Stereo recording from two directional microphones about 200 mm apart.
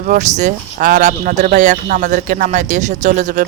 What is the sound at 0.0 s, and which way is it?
Speech, 40° right (ahead or behind).